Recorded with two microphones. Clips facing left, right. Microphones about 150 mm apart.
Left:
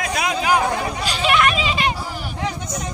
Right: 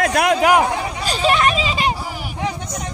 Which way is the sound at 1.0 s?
35° right (ahead or behind).